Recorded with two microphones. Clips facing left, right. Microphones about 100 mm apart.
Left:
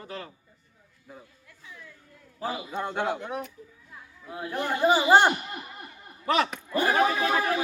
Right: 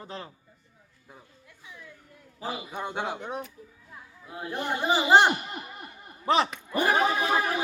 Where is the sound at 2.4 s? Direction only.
10° right (ahead or behind).